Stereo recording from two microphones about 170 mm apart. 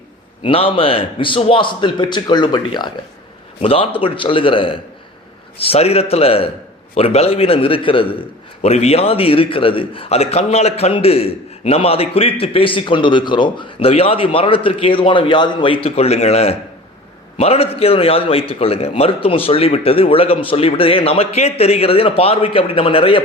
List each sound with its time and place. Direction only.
0.4 s a man's voice: 30° left (ahead or behind)